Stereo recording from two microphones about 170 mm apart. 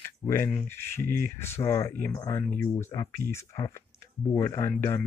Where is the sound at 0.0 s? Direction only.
15° left (ahead or behind).